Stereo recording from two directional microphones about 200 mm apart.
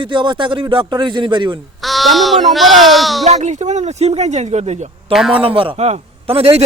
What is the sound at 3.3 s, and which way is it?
Speech, 35° right (ahead or behind).